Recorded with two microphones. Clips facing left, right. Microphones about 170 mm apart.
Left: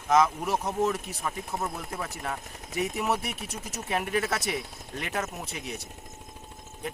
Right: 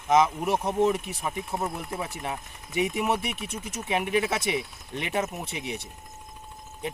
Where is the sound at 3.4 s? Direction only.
55° right (ahead or behind).